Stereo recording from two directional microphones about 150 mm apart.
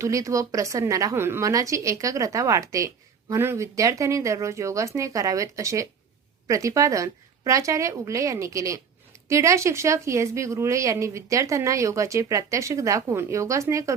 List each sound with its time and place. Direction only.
0.0 s a woman's voice: 20° right (ahead or behind)